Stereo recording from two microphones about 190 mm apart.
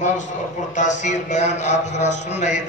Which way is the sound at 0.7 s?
40° left (ahead or behind).